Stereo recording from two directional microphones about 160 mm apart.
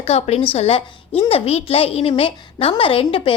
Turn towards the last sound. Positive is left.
turn(degrees=35)  # may be behind; listen again after turning